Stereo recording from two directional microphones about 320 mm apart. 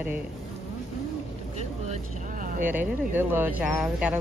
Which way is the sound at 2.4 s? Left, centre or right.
Right.